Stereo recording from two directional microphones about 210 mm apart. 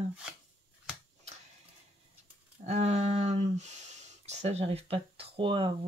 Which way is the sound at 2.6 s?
30° right (ahead or behind).